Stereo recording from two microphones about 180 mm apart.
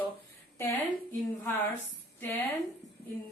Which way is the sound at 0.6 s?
10° left (ahead or behind).